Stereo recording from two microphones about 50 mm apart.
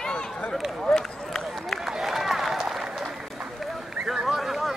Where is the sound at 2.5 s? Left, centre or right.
Centre.